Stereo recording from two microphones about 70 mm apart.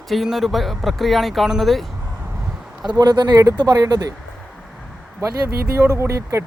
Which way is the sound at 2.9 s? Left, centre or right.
Right.